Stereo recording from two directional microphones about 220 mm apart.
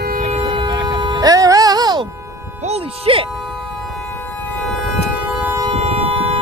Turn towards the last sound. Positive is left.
turn(degrees=-25)  # may be behind; listen again after turning